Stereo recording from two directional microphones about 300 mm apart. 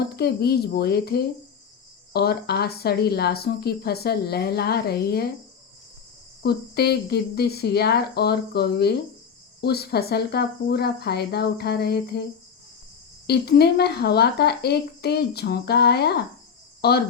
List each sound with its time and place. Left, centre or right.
0.2 s speech: left
6.4 s speech: left
13.2 s speech: left